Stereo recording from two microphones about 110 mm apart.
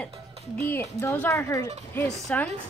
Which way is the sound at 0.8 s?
30° left (ahead or behind).